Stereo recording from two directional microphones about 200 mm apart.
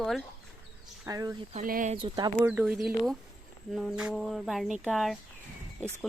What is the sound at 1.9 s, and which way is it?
Speech, 25° right (ahead or behind).